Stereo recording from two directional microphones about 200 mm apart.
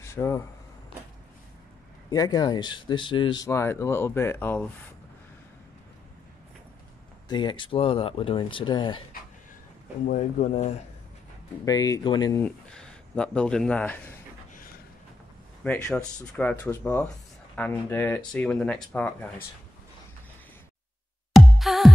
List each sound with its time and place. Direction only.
0.0 s a sound: 15° left (ahead or behind)
2.0 s speech: 20° left (ahead or behind)
7.2 s speech: 25° left (ahead or behind)
10.0 s speech: 40° left (ahead or behind)
11.6 s speech: 20° left (ahead or behind)
12.7 s speech: 5° left (ahead or behind)
15.6 s speech: 5° left (ahead or behind)
21.3 s music: centre (ahead or behind)